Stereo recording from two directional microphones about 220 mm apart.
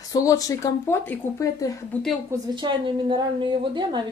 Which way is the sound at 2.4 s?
20° right (ahead or behind).